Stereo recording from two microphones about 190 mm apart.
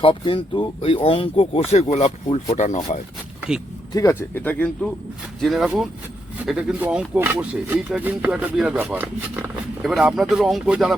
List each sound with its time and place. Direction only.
0.0 s speech: 25° left (ahead or behind)
3.9 s speech: 15° left (ahead or behind)